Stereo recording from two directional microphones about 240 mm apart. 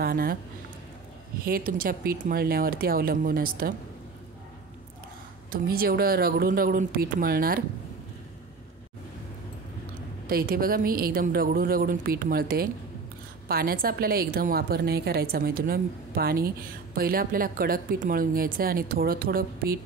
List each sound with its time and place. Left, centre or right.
0.0 s a woman's voice: right
1.4 s a woman's voice: right
5.5 s a woman's voice: right
10.2 s a woman's voice: right